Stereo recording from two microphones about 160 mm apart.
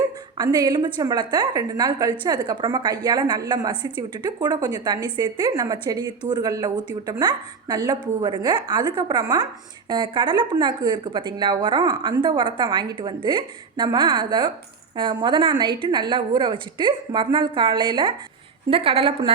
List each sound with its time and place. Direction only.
0.3 s a woman's voice: 25° right (ahead or behind)